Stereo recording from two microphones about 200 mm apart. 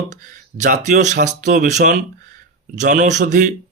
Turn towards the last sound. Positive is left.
turn(degrees=-35)  # may be behind; listen again after turning